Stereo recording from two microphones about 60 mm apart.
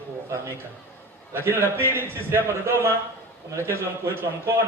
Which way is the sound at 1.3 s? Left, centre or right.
Right.